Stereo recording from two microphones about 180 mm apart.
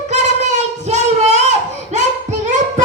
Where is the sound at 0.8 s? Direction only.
40° right (ahead or behind).